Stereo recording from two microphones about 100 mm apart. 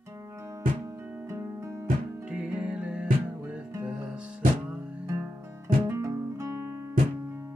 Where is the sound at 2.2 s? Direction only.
10° right (ahead or behind).